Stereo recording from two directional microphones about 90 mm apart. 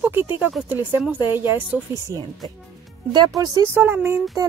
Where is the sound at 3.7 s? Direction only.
25° right (ahead or behind).